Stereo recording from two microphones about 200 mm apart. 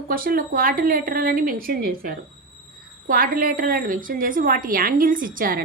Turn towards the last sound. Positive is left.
turn(degrees=-45)  # may be behind; listen again after turning